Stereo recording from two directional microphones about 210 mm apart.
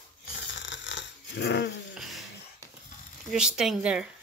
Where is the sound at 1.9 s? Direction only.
Centre (ahead or behind).